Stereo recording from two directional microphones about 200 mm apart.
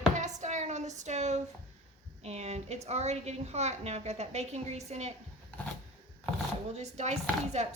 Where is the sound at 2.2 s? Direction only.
35° right (ahead or behind).